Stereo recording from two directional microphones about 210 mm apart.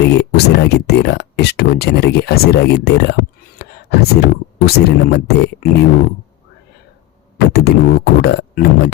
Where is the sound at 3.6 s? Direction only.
50° left (ahead or behind).